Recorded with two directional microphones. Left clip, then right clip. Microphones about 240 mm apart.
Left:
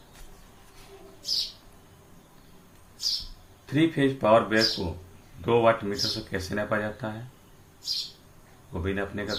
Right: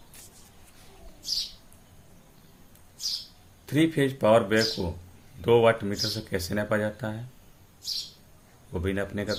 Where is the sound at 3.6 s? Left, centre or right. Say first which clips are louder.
Even; right.